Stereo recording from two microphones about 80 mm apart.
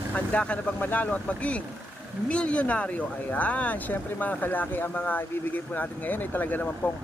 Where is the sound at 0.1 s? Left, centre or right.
Centre.